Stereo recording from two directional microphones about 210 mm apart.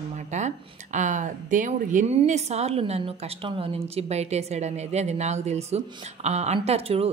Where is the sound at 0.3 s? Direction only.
35° right (ahead or behind).